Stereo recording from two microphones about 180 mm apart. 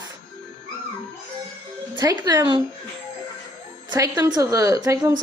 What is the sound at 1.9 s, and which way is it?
Speech, 20° right (ahead or behind).